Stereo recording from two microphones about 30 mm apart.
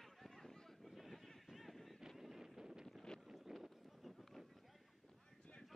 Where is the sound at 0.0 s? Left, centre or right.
Centre.